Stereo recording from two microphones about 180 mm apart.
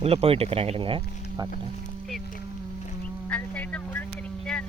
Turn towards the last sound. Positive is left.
turn(degrees=5)  # may be behind; listen again after turning